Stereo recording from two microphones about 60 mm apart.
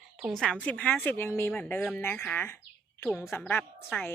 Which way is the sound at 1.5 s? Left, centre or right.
Left.